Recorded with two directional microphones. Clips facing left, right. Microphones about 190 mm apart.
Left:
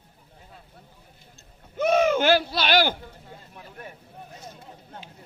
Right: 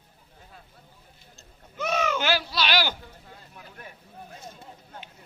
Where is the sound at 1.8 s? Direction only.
55° left (ahead or behind).